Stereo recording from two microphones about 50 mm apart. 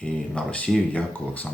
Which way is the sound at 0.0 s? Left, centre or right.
Left.